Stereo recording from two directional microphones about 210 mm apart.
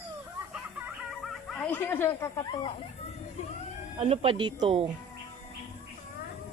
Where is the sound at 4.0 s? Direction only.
30° right (ahead or behind).